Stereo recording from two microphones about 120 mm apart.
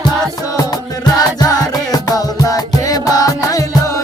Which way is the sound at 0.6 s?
35° left (ahead or behind).